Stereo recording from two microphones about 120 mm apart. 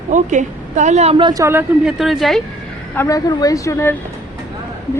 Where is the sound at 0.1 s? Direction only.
90° right; by 1.1 s 70° right (ahead or behind).